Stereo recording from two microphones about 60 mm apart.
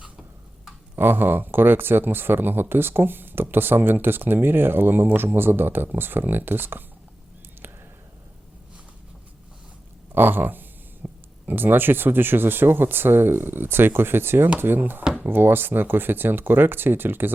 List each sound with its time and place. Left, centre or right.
0.9 s speech: right
10.2 s speech: right